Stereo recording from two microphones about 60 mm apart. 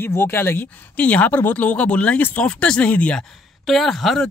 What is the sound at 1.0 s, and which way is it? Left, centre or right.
Speech, left.